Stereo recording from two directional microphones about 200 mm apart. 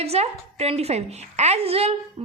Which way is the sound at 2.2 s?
35° right (ahead or behind).